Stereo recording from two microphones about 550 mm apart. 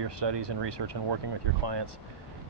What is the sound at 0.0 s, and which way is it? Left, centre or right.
Speech, right.